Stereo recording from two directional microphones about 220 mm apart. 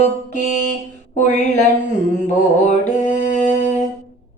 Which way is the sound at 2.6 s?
35° left (ahead or behind).